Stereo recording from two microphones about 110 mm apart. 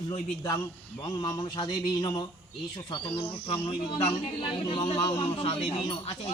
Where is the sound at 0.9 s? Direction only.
45° left (ahead or behind).